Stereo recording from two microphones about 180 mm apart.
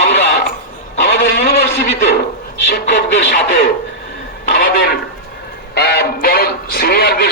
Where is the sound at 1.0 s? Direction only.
65° left (ahead or behind).